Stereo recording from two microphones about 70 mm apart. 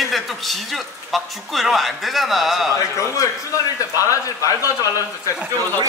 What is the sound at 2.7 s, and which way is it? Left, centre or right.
Speech, left.